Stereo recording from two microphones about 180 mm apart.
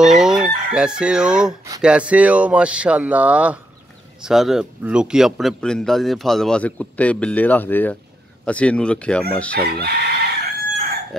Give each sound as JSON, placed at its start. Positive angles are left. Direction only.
{"t": 0.0, "sound": "chicken", "side_deg": -5}
{"t": 0.7, "sound": "a man's voice", "side_deg": -5}
{"t": 9.8, "sound": "chicken", "side_deg": -60}